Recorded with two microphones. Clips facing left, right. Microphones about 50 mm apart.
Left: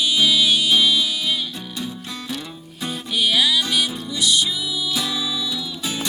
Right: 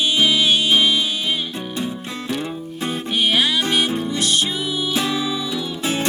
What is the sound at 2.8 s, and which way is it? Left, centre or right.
Music, right.